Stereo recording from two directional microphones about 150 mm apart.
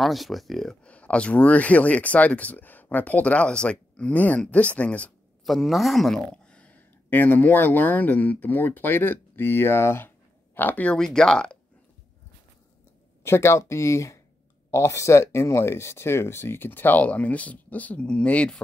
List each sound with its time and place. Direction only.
0.0 s speech: centre (ahead or behind)
13.2 s speech: 15° left (ahead or behind)